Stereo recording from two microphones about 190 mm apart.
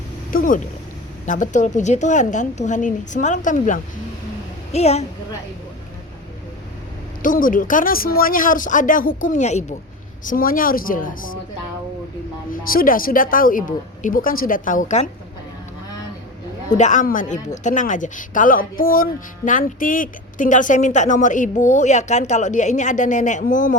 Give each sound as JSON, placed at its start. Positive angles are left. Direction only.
{"t": 0.3, "sound": "a woman's voice", "side_deg": 45}
{"t": 7.2, "sound": "a woman's voice", "side_deg": 45}
{"t": 10.2, "sound": "a woman's voice", "side_deg": 50}
{"t": 12.5, "sound": "a woman's voice", "side_deg": 50}
{"t": 16.7, "sound": "a woman's voice", "side_deg": 40}